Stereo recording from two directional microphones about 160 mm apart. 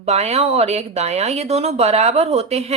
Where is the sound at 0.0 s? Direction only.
40° right (ahead or behind).